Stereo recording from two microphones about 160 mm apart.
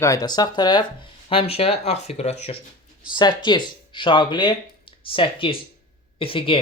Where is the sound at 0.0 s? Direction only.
20° left (ahead or behind).